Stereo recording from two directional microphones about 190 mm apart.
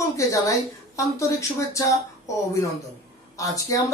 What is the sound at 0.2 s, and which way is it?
Speech, 15° left (ahead or behind).